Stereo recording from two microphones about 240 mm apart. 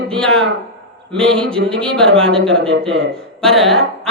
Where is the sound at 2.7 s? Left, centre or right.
Right.